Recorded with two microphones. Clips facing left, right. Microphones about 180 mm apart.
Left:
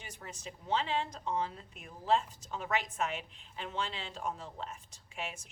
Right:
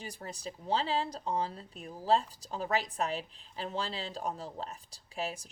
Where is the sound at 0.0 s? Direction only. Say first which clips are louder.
Right 5 dB; 35° right (ahead or behind).